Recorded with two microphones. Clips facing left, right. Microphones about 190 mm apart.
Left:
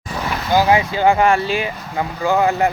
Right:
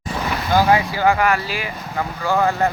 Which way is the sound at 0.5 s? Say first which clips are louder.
Left 1 dB; 15° left (ahead or behind).